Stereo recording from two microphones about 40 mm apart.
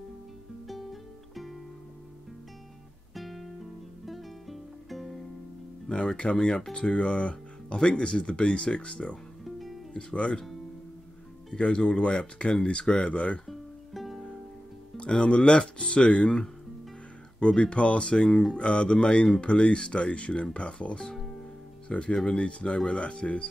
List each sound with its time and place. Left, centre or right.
1.3 s music: centre
3.2 s guitar: centre
4.0 s music: centre
5.9 s speech: left
9.4 s music: centre
9.9 s speech: left
11.6 s speech: left
13.5 s music: centre
15.0 s speech: left